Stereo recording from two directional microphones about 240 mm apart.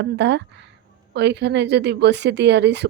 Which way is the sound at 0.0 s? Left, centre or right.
Right.